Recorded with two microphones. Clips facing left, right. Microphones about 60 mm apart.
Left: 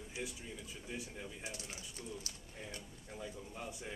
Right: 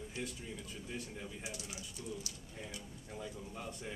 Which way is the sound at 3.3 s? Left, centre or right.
Centre.